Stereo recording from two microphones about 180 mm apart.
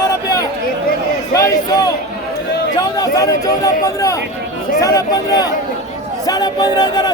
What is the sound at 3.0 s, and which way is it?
Speech, 20° left (ahead or behind).